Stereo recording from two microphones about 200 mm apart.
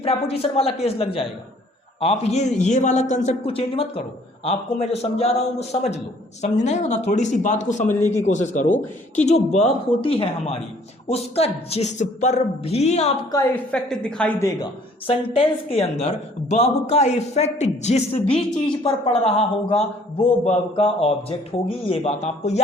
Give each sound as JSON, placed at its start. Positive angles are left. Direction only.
{"t": 0.0, "sound": "a man's voice", "side_deg": 30}
{"t": 13.3, "sound": "a woman's voice", "side_deg": 5}
{"t": 15.0, "sound": "a man's voice", "side_deg": 30}